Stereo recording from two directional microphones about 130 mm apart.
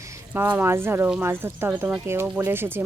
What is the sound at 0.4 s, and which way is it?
Speech, 15° right (ahead or behind).